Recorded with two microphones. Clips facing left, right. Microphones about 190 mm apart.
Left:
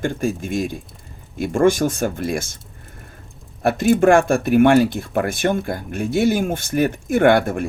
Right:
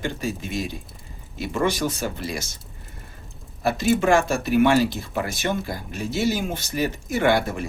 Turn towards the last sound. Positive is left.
turn(degrees=55)  # may be behind; listen again after turning